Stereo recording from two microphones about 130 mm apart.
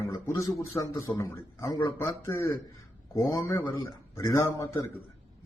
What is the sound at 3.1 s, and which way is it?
A man's voice, 25° left (ahead or behind).